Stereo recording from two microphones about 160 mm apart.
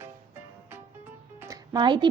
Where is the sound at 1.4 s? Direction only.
20° right (ahead or behind).